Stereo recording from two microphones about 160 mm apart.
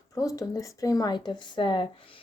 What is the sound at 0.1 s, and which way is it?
A woman's voice, 20° left (ahead or behind).